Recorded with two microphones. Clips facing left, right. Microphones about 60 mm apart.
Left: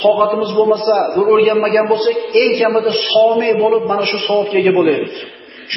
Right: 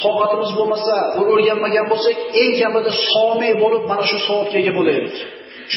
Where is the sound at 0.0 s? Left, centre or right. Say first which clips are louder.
Left 3 dB; centre.